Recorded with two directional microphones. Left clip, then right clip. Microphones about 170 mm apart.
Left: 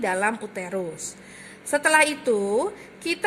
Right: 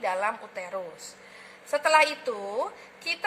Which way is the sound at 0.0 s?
75° left (ahead or behind).